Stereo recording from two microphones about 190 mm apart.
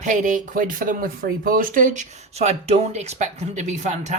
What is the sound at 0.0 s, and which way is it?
Speech, 40° right (ahead or behind).